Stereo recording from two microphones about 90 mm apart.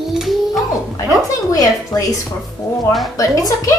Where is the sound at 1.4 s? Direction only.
40° left (ahead or behind).